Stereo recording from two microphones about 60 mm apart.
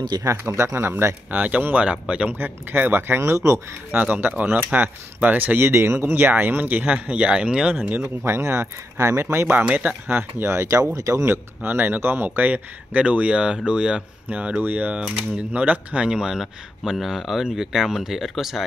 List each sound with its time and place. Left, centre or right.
0.4 s speech: right
1.3 s speech: right
2.3 s speech: right
3.2 s speech: right
3.9 s speech: right
5.6 s speech: right
8.3 s speech: right
9.6 s speech: right
10.5 s speech: right
11.0 s speech: right
11.2 s speech: right; by 18.6 s centre